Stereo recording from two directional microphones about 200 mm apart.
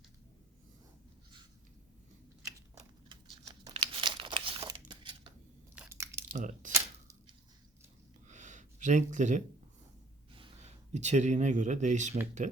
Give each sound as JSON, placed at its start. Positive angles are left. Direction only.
{"t": 3.5, "sound": "crumpling", "side_deg": -20}
{"t": 5.7, "sound": "a sound", "side_deg": -10}
{"t": 6.3, "sound": "speech", "side_deg": -40}
{"t": 6.7, "sound": "a sound", "side_deg": -15}
{"t": 8.3, "sound": "gasp", "side_deg": -40}
{"t": 10.3, "sound": "speech", "side_deg": -30}